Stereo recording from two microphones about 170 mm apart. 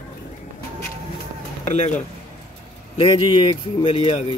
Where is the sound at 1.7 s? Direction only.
40° left (ahead or behind).